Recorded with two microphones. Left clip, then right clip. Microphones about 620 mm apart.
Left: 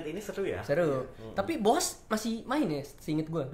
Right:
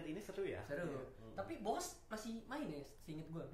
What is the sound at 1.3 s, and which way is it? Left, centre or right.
A woman's voice, left.